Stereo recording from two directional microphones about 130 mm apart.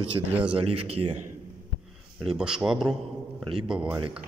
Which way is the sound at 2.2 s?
5° right (ahead or behind).